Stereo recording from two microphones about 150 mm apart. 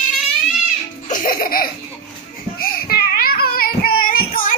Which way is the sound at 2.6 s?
85° left.